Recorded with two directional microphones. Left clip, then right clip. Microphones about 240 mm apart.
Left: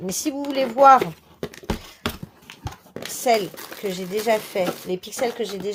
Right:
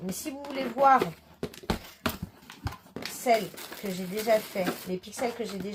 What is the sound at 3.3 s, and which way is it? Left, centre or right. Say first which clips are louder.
Speech: left 5 dB; left.